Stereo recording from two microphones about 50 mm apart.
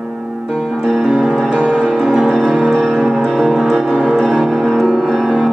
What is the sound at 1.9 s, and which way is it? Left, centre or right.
Music, centre.